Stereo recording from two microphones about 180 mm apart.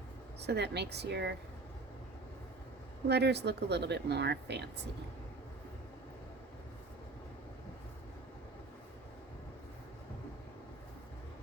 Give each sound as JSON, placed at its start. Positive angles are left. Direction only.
{"t": 0.4, "sound": "speech", "side_deg": -70}
{"t": 3.1, "sound": "speech", "side_deg": -70}